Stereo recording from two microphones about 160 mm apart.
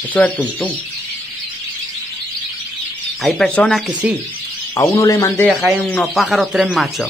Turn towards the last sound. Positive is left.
turn(degrees=0)  # may be behind; listen again after turning